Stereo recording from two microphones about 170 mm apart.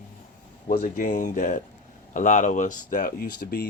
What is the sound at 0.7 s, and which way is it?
Speech, 50° left (ahead or behind).